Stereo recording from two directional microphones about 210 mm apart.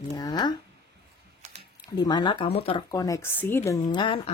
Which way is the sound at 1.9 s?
20° left (ahead or behind).